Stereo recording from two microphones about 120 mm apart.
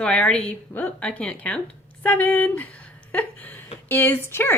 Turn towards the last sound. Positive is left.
turn(degrees=20)  # may be behind; listen again after turning